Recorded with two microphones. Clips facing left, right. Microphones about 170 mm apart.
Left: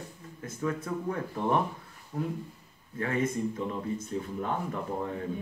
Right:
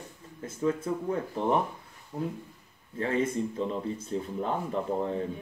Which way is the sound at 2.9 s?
30° right (ahead or behind).